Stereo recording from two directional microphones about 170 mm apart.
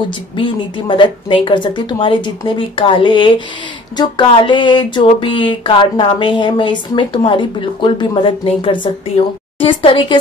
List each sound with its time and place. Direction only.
0.4 s speech: 30° left (ahead or behind)